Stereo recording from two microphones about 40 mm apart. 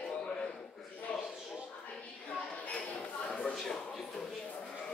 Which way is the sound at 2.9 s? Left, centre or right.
Left.